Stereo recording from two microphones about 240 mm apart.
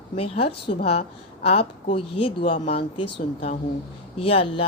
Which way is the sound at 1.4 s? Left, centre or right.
Left.